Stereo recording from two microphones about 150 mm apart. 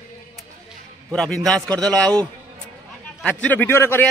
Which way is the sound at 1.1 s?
5° left (ahead or behind).